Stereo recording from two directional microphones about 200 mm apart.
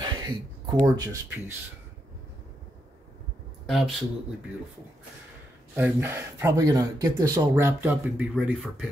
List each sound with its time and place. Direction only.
0.0 s a sound: 20° right (ahead or behind)
0.9 s speech: 20° right (ahead or behind)
3.6 s a man's voice: centre (ahead or behind)
5.8 s speech: 10° right (ahead or behind)